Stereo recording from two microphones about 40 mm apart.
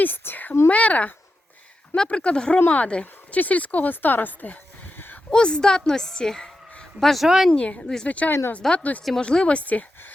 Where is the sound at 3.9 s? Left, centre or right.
Left.